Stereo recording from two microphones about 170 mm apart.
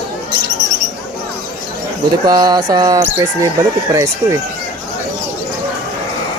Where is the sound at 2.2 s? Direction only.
25° right (ahead or behind).